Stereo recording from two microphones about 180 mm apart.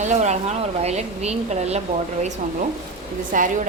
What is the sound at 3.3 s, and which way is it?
Speech, 50° right (ahead or behind).